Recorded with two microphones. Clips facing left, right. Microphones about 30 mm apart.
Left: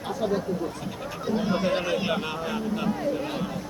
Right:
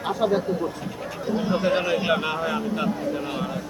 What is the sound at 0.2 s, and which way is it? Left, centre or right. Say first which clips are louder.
Speech: right 4 dB; right.